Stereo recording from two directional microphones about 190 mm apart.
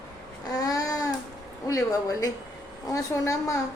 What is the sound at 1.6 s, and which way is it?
A woman's voice, 15° left (ahead or behind).